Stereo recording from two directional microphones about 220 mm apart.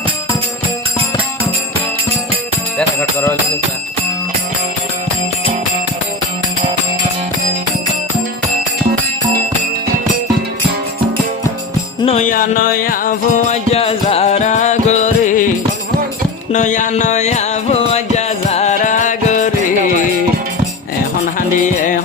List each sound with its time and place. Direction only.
2.7 s music: 5° left (ahead or behind)
12.0 s music: 35° left (ahead or behind)
16.5 s music: 35° left (ahead or behind)
21.3 s music: 35° left (ahead or behind)